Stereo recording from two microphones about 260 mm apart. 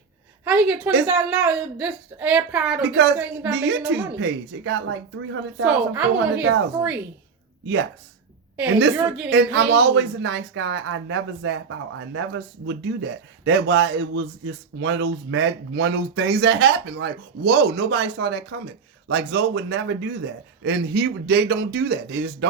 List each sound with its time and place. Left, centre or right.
0.4 s a woman's voice: centre
2.9 s speech: right
5.6 s a woman's voice: centre
7.6 s speech: right
9.0 s a woman's voice: centre
9.3 s speech: right